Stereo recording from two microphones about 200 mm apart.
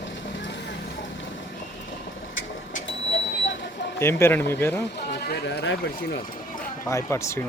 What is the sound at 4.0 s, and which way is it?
Speech, 10° left (ahead or behind).